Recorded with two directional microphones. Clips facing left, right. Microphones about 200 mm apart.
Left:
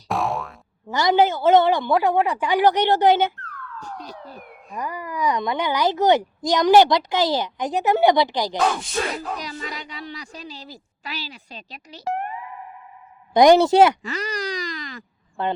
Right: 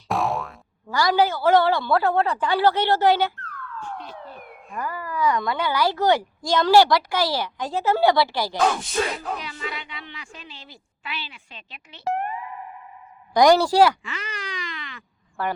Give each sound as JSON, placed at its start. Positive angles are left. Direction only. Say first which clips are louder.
{"t": 0.1, "sound": "boing", "louder": "even", "side_deg": 0}
{"t": 0.9, "sound": "speech", "louder": "left 2 dB", "side_deg": 20}
{"t": 3.8, "sound": "speech", "louder": "right 1 dB", "side_deg": 40}
{"t": 4.7, "sound": "speech", "louder": "even", "side_deg": 15}
{"t": 8.5, "sound": "speech", "louder": "right 2 dB", "side_deg": 0}
{"t": 9.4, "sound": "a woman's voice", "louder": "left 1 dB", "side_deg": 40}
{"t": 13.3, "sound": "speech", "louder": "left 3 dB", "side_deg": 20}
{"t": 14.0, "sound": "wail", "louder": "left 7 dB", "side_deg": 40}
{"t": 15.4, "sound": "speech", "louder": "left 2 dB", "side_deg": 20}